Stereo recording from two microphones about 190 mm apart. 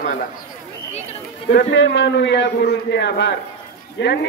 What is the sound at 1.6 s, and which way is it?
A man's voice, 70° left (ahead or behind).